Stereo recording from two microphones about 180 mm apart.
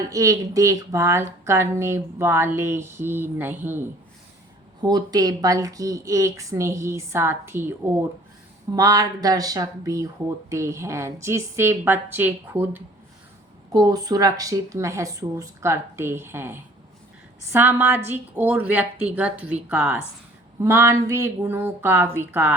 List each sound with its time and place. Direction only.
0.1 s a woman's voice: 20° right (ahead or behind)
4.8 s a woman's voice: 25° right (ahead or behind)
13.7 s a woman's voice: 20° right (ahead or behind)